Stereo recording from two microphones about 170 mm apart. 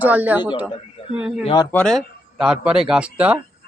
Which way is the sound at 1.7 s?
5° left (ahead or behind).